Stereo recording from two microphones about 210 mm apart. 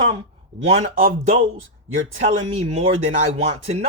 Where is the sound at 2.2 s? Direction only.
35° right (ahead or behind).